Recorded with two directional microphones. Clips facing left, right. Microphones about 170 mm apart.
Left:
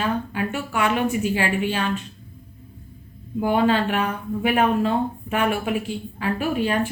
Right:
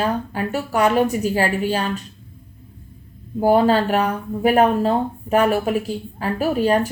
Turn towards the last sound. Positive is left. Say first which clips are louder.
# right 4 dB
turn(degrees=-40)  # may be behind; listen again after turning